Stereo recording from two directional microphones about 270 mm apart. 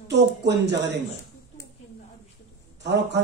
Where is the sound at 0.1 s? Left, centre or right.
Right.